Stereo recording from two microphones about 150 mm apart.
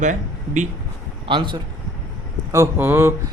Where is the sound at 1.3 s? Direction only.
35° right (ahead or behind).